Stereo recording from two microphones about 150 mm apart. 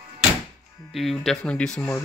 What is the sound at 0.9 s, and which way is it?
Speech, centre (ahead or behind).